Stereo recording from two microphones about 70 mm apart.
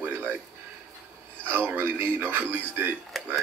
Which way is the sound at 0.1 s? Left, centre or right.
Right.